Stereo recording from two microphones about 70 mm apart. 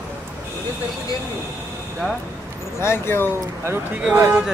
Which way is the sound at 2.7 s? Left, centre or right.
Left.